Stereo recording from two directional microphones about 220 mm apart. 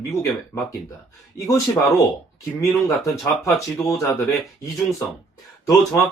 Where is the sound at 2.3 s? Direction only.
15° left (ahead or behind).